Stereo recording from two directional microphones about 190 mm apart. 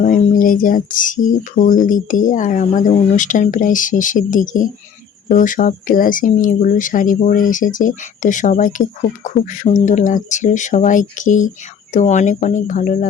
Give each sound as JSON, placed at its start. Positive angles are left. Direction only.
{"t": 0.0, "sound": "speech", "side_deg": 45}